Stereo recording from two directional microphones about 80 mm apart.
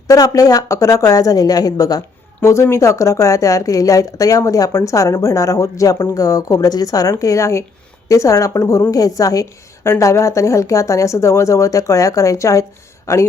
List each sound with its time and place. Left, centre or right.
0.1 s speech: left
2.4 s speech: left